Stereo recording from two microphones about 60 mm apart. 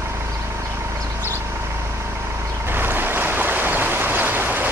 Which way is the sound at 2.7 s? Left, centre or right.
Right.